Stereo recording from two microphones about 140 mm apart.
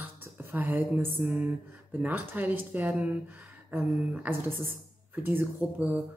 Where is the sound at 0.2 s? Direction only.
15° right (ahead or behind).